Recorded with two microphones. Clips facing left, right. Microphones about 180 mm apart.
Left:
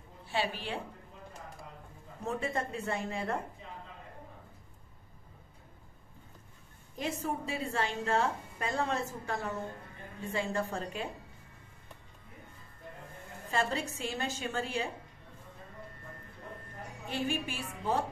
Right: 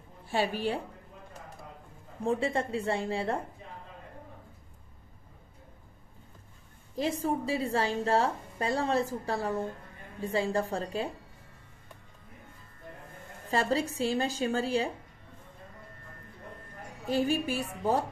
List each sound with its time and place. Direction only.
0.3 s a woman's voice: 45° right (ahead or behind)
2.2 s a woman's voice: 30° right (ahead or behind)
7.0 s a woman's voice: 35° right (ahead or behind)
13.5 s a woman's voice: 35° right (ahead or behind)
17.1 s a woman's voice: 35° right (ahead or behind)